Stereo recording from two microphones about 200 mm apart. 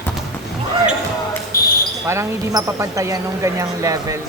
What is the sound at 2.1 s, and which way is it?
Speech, 15° right (ahead or behind).